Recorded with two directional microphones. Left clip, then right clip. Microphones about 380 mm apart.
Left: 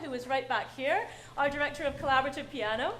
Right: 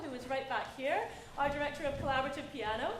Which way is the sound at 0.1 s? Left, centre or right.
Left.